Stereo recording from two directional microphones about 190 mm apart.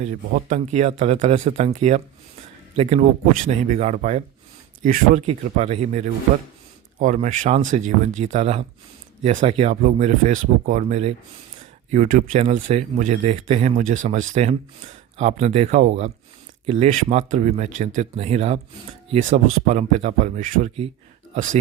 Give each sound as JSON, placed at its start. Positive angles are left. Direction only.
{"t": 0.0, "sound": "speech", "side_deg": -40}
{"t": 5.2, "sound": "speech", "side_deg": -35}